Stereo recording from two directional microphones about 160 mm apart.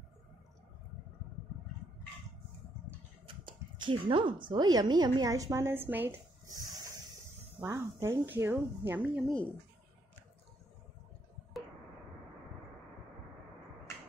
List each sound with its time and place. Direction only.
3.3 s speech: 30° right (ahead or behind); by 9.2 s 10° right (ahead or behind)